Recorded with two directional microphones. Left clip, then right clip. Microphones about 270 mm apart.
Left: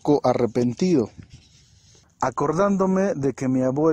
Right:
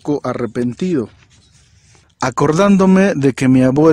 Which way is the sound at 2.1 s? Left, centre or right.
Right.